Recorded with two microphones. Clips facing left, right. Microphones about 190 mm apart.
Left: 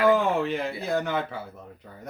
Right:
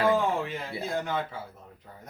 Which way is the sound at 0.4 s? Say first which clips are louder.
Left 6 dB; 70° left (ahead or behind).